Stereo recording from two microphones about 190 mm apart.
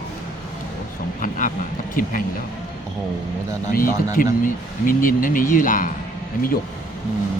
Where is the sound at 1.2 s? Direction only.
45° left (ahead or behind).